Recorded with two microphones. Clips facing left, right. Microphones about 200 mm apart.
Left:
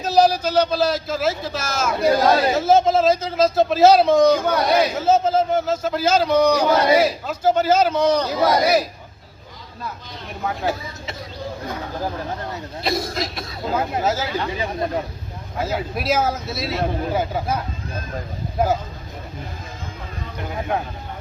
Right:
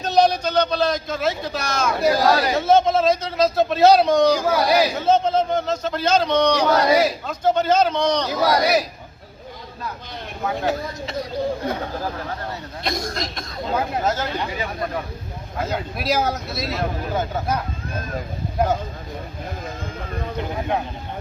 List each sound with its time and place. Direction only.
0.0 s speech: 5° left (ahead or behind)
10.4 s speech: centre (ahead or behind)
12.8 s speech: 5° left (ahead or behind)
14.6 s speech: 25° left (ahead or behind)
15.5 s speech: 5° left (ahead or behind)
18.6 s speech: centre (ahead or behind)